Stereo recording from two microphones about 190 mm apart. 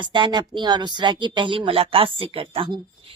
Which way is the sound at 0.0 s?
25° right (ahead or behind).